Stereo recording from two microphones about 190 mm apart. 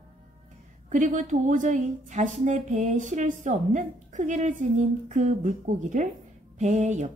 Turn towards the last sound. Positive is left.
turn(degrees=-40)  # may be behind; listen again after turning